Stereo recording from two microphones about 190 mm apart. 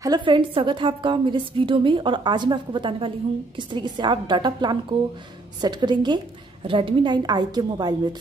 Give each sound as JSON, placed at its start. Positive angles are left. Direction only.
{"t": 0.0, "sound": "a woman's voice", "side_deg": -25}